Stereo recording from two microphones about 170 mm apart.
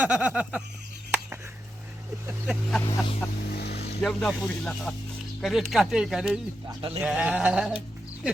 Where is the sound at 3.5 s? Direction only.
70° left (ahead or behind).